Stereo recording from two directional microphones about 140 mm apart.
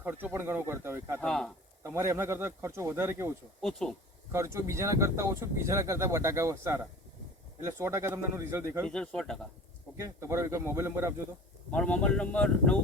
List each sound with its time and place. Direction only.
0.0 s speech: 15° right (ahead or behind)
1.2 s speech: 5° left (ahead or behind)
1.8 s speech: 20° right (ahead or behind)
3.6 s speech: 5° left (ahead or behind)
4.3 s speech: 20° right (ahead or behind)
8.9 s speech: 5° left (ahead or behind)
10.0 s speech: 20° right (ahead or behind)
11.7 s speech: 10° left (ahead or behind)